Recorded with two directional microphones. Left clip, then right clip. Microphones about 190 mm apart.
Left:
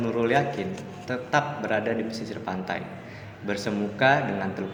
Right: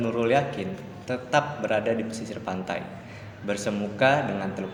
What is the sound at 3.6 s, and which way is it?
Speech, 30° right (ahead or behind).